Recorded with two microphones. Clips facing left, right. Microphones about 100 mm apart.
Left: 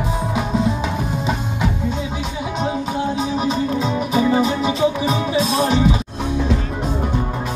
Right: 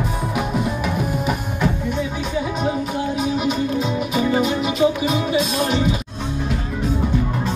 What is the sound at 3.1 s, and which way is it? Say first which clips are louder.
Music: left 1 dB; 35° left (ahead or behind).